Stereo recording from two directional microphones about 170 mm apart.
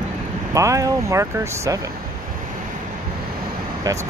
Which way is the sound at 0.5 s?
20° right (ahead or behind).